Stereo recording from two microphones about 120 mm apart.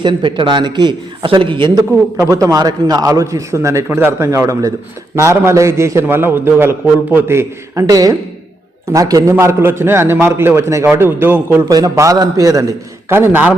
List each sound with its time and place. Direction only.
0.0 s a man's voice: 40° right (ahead or behind)
2.3 s a man's voice: 30° right (ahead or behind)
11.7 s a man's voice: 30° right (ahead or behind)